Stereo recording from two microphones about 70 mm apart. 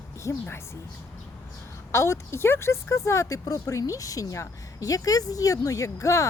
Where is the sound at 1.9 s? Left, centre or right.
Left.